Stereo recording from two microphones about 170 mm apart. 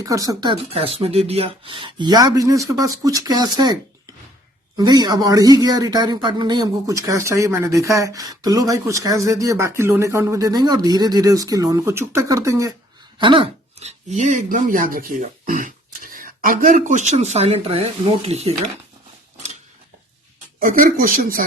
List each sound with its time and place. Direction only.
0.0 s a man's voice: 20° right (ahead or behind)
4.8 s a man's voice: 25° right (ahead or behind)
13.1 s speech: 30° right (ahead or behind)
20.6 s speech: 55° right (ahead or behind)